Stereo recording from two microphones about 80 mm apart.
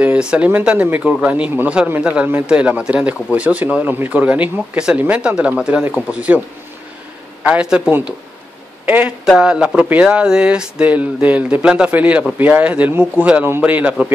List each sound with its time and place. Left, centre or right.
0.0 s a sound: centre
0.5 s speech: centre
7.4 s a man's voice: centre